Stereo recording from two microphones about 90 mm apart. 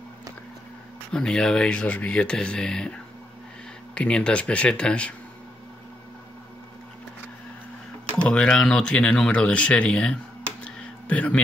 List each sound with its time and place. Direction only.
1.1 s speech: 10° left (ahead or behind)
8.2 s speech: 10° left (ahead or behind)
10.6 s a sound: 15° left (ahead or behind)